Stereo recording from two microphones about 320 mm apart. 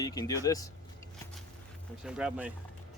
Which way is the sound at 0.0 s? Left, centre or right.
Centre.